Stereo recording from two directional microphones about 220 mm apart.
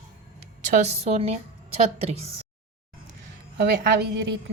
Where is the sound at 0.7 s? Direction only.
30° right (ahead or behind).